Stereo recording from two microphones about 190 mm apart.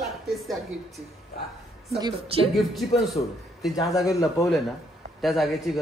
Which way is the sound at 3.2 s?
30° left (ahead or behind).